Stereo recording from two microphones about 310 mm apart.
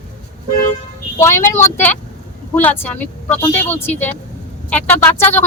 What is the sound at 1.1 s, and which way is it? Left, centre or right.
A woman's voice, centre.